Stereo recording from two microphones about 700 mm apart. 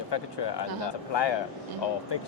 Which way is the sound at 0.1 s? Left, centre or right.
Left.